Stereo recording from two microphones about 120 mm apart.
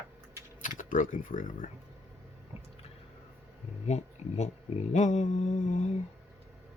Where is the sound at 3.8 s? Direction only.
75° left (ahead or behind).